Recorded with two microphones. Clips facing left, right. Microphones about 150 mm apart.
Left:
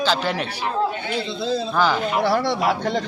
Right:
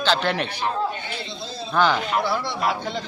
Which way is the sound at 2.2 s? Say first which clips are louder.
Left 5 dB; 75° left (ahead or behind).